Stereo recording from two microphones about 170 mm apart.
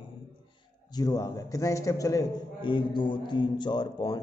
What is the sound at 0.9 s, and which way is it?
A man's voice, 20° left (ahead or behind).